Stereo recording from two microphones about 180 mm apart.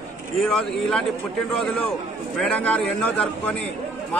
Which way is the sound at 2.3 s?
5° left (ahead or behind).